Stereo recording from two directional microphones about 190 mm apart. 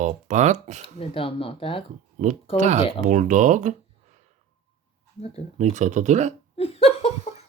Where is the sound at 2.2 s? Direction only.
40° right (ahead or behind).